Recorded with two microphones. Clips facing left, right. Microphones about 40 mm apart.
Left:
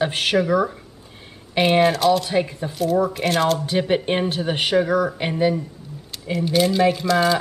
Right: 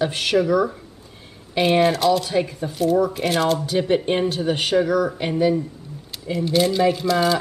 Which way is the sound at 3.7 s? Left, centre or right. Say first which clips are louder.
Right 1 dB; centre.